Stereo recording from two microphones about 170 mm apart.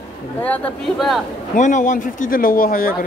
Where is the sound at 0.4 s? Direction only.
5° left (ahead or behind).